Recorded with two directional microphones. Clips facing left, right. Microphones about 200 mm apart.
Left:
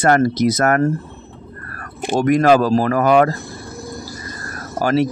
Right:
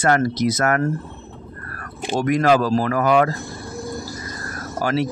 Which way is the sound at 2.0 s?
50° left (ahead or behind).